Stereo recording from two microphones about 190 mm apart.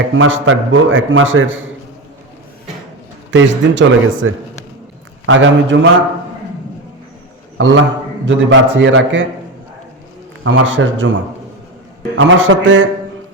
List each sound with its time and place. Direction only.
0.1 s a man's voice: 90° right
3.3 s a man's voice: 85° right
5.7 s a man's voice: 60° right (ahead or behind)
7.6 s a man's voice: 80° right
10.4 s a man's voice: 85° right
12.1 s a man's voice: 75° right (ahead or behind)